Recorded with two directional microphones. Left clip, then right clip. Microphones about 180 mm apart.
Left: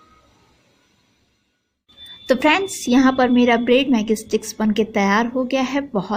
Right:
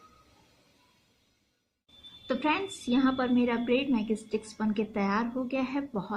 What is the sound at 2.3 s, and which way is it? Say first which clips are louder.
A woman's voice: left 13 dB; 50° left (ahead or behind).